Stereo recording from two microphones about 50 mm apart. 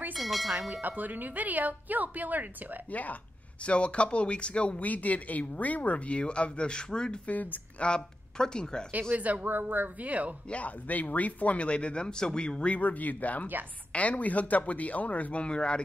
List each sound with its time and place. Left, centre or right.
0.1 s tubular bells: centre
0.8 s a woman's voice: right
2.9 s speech: left; by 7.2 s centre
7.2 s speech: left
7.9 s speech: centre
9.1 s a woman's voice: right
10.5 s speech: left